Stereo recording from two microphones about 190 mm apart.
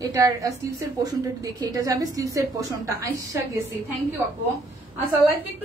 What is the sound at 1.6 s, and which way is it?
Speech, 20° right (ahead or behind).